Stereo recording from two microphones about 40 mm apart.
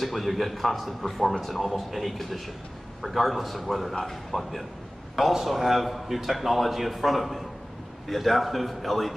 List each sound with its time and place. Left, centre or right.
0.0 s a man's voice: centre